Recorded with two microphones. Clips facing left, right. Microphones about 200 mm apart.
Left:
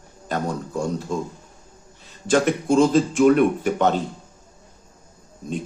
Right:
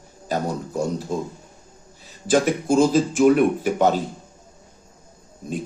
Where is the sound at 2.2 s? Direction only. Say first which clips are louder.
Even; centre (ahead or behind).